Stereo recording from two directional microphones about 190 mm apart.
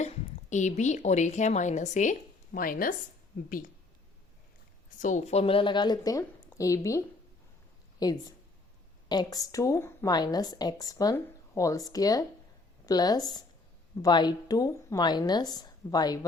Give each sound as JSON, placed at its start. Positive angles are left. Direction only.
{"t": 0.5, "sound": "a woman's voice", "side_deg": 40}
{"t": 4.9, "sound": "a woman's voice", "side_deg": 40}